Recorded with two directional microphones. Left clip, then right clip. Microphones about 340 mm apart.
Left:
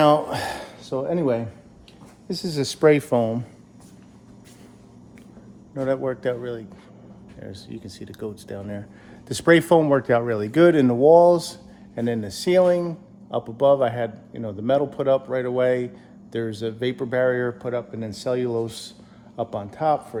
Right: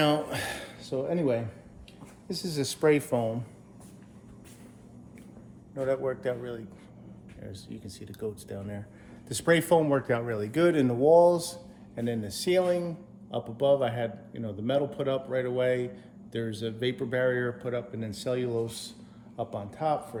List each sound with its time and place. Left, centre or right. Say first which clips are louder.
0.0 s speech: left 9 dB; centre
5.7 s speech: left 5 dB; left